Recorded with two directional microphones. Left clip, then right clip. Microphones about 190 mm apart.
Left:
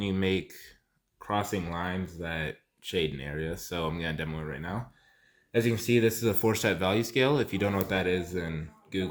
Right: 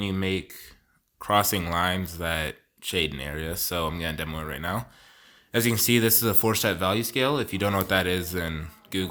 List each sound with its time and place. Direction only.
0.0 s speech: 15° right (ahead or behind)
1.2 s speech: 30° right (ahead or behind); by 7.7 s 15° right (ahead or behind)
7.7 s speech: 30° right (ahead or behind)